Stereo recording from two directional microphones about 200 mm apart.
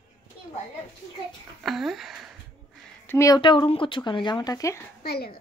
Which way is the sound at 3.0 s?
15° left (ahead or behind).